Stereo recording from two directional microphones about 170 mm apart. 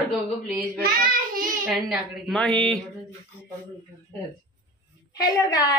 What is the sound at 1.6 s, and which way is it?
A woman's voice, 5° right (ahead or behind).